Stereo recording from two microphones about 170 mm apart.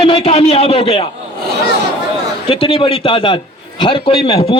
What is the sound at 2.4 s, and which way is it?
A man's voice, 30° left (ahead or behind).